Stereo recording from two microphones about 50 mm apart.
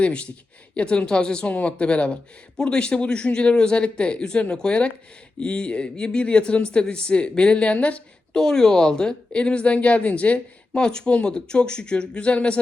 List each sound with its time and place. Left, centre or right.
0.0 s speech: left
8.4 s speech: centre